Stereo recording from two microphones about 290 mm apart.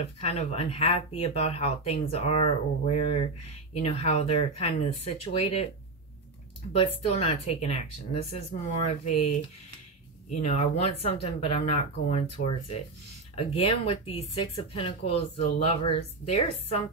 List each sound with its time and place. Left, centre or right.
0.2 s speech: left
6.7 s speech: centre
10.4 s speech: left